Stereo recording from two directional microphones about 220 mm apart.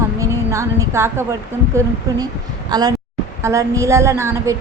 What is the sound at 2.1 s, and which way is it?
Speech, 15° right (ahead or behind).